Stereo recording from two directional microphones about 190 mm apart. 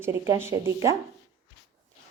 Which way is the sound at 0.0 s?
15° right (ahead or behind).